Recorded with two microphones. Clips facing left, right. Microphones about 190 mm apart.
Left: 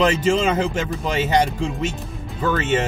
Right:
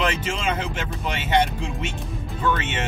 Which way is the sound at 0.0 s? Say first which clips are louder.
Left 7 dB; 40° left (ahead or behind).